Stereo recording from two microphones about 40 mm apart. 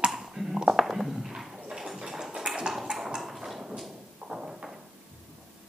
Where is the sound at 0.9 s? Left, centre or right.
Centre.